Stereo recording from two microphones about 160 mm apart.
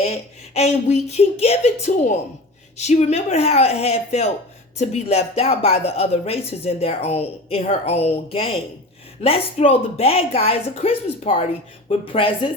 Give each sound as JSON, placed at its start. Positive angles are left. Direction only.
{"t": 0.0, "sound": "speech", "side_deg": 40}